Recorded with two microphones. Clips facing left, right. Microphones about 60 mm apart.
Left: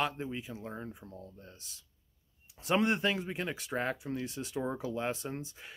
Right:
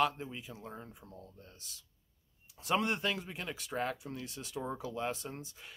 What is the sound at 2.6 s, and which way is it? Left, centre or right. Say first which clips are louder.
Speech: left 3 dB; centre.